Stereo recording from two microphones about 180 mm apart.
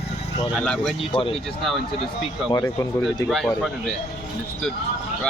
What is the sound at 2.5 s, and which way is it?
Speech, 20° left (ahead or behind).